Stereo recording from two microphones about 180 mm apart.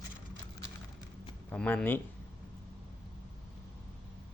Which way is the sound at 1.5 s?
5° left (ahead or behind).